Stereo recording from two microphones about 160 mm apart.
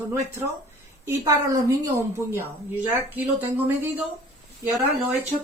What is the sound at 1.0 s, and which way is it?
A woman's voice, 20° right (ahead or behind).